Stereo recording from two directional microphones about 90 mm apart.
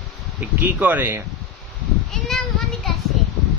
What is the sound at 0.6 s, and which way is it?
Speech, 20° right (ahead or behind).